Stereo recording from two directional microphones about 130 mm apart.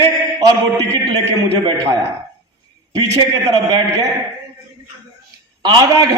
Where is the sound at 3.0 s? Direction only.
25° right (ahead or behind).